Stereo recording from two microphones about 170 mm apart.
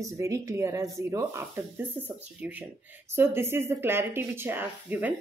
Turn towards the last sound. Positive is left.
turn(degrees=-10)  # may be behind; listen again after turning